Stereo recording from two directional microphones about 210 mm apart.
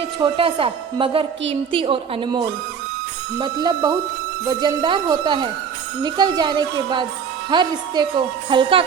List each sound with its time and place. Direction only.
0.2 s a woman's voice: 25° right (ahead or behind)